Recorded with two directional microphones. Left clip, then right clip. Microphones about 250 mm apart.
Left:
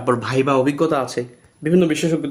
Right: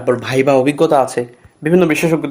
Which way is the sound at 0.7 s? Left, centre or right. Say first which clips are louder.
Right 7 dB; centre.